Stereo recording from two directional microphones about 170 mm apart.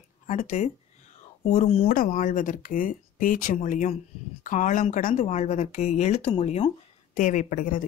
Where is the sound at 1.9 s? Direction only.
50° left (ahead or behind).